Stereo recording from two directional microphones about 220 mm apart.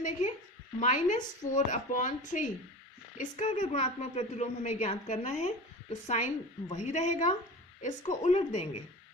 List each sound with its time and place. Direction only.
0.8 s a woman's voice: 35° left (ahead or behind)